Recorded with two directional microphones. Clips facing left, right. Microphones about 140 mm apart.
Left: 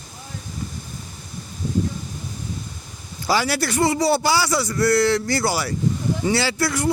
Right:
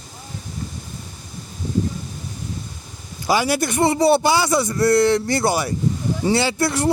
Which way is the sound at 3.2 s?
20° right (ahead or behind).